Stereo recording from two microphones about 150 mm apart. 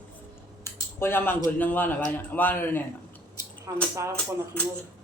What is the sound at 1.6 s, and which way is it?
Speech, 10° left (ahead or behind).